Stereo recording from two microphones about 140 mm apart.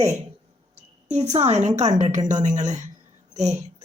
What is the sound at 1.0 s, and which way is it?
A woman's voice, 55° right (ahead or behind).